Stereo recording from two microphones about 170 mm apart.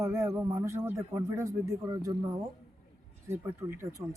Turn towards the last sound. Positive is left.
turn(degrees=-15)  # may be behind; listen again after turning